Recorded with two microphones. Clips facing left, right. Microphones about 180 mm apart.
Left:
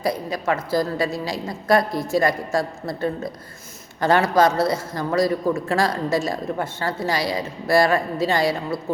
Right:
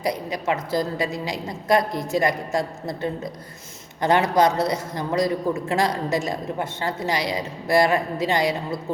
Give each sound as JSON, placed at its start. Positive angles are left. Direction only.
{"t": 0.0, "sound": "a man's voice", "side_deg": -20}